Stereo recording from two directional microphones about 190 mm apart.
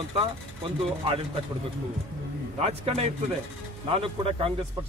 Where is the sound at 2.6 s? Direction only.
35° right (ahead or behind).